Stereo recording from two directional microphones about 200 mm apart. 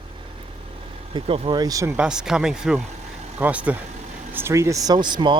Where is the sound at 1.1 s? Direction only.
25° right (ahead or behind).